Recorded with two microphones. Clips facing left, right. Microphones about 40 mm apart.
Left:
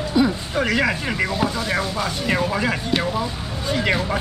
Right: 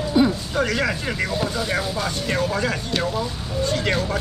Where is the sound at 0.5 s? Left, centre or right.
Centre.